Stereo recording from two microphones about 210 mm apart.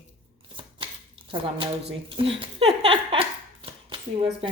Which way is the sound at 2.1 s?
25° right (ahead or behind).